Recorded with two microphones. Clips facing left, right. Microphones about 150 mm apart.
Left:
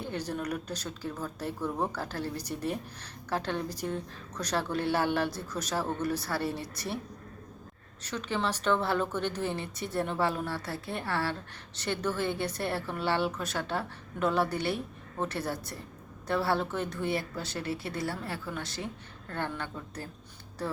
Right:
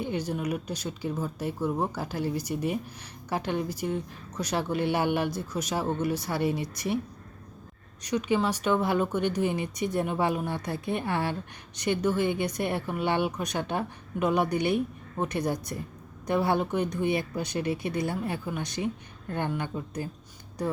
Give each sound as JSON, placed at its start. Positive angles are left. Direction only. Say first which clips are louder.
{"t": 0.0, "sound": "speech", "louder": "right 4 dB", "side_deg": -10}
{"t": 8.0, "sound": "speech", "louder": "right 6 dB", "side_deg": -15}